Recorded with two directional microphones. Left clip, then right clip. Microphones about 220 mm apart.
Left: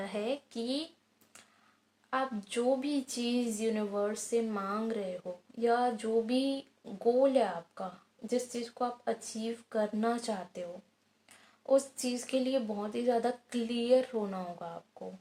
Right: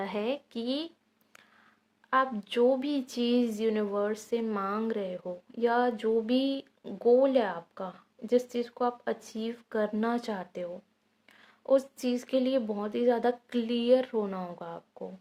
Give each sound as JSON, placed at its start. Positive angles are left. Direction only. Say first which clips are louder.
{"t": 0.0, "sound": "speech", "louder": "right 3 dB", "side_deg": -35}
{"t": 2.0, "sound": "speech", "louder": "right 7 dB", "side_deg": -40}